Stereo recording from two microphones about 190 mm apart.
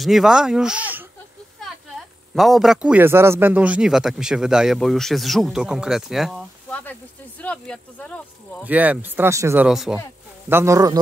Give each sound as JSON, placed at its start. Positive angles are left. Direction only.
{"t": 0.0, "sound": "a man's voice", "side_deg": 0}
{"t": 2.3, "sound": "a man's voice", "side_deg": 0}
{"t": 8.6, "sound": "speech", "side_deg": -10}
{"t": 9.7, "sound": "a man's voice", "side_deg": 0}
{"t": 10.5, "sound": "speech", "side_deg": -15}